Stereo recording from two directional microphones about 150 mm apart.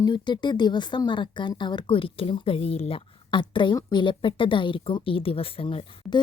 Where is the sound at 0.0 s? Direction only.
30° left (ahead or behind).